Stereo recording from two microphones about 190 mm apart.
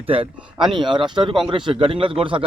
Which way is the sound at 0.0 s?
30° right (ahead or behind).